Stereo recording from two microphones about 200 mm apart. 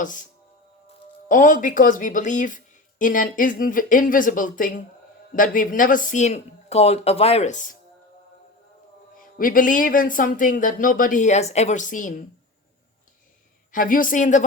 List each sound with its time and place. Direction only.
0.0 s speech: 40° left (ahead or behind)
1.3 s speech: 40° left (ahead or behind)
9.1 s speech: 45° left (ahead or behind)
13.7 s speech: 45° left (ahead or behind)